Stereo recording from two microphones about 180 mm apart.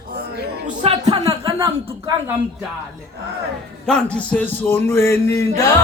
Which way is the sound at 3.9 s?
5° left (ahead or behind).